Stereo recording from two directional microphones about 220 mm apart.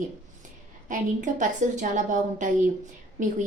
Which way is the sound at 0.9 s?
35° right (ahead or behind).